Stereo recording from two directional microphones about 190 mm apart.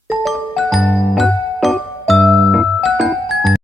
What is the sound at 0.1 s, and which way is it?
Music, centre (ahead or behind).